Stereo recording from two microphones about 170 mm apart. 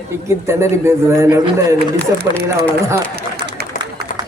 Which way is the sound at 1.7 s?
70° right (ahead or behind).